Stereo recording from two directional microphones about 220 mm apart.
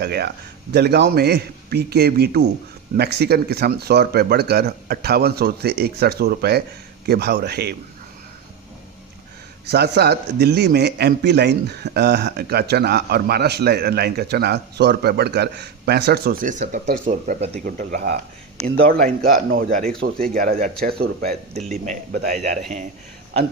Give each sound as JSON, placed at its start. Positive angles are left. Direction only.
{"t": 0.0, "sound": "speech", "side_deg": -50}
{"t": 9.6, "sound": "speech", "side_deg": -50}
{"t": 17.7, "sound": "speech", "side_deg": -45}